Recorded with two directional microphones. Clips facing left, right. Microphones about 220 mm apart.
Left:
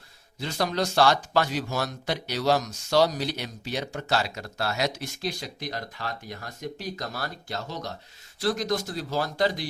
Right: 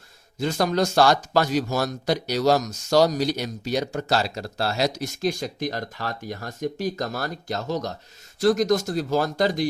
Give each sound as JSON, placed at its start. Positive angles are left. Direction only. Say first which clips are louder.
{"t": 0.3, "sound": "speech", "louder": "right 5 dB", "side_deg": -45}